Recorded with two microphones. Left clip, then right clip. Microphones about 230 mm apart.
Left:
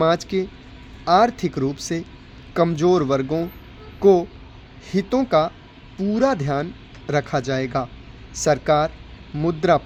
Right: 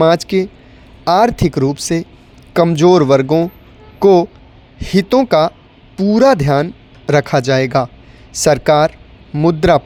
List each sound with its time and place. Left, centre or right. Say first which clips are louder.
0.0 s speech: right 8 dB; right